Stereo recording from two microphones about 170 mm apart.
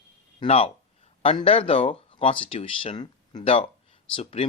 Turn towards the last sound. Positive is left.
turn(degrees=35)  # may be behind; listen again after turning